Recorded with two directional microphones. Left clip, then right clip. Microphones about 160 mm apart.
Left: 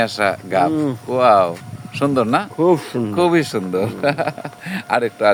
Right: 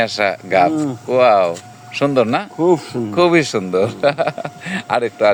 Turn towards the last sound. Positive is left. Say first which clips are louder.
# right 1 dB
turn(degrees=0)  # may be behind; listen again after turning